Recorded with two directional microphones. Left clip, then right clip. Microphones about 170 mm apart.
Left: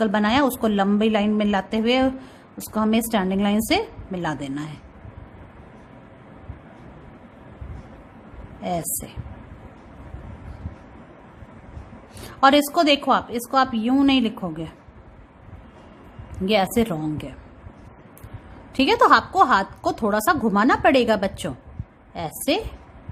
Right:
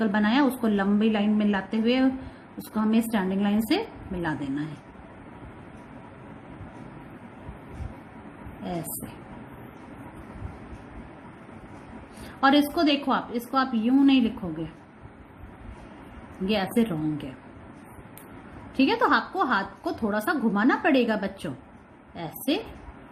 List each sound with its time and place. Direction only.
0.0 s a woman's voice: 30° left (ahead or behind)
12.4 s a woman's voice: 35° left (ahead or behind)
16.5 s a woman's voice: 30° left (ahead or behind)
18.8 s a woman's voice: 35° left (ahead or behind)